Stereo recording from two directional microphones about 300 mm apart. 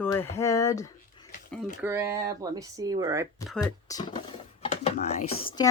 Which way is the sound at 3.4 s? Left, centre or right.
Centre.